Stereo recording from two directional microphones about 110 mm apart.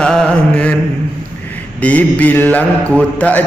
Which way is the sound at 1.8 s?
15° left (ahead or behind).